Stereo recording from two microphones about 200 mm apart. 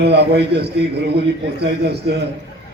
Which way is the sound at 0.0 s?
55° right (ahead or behind).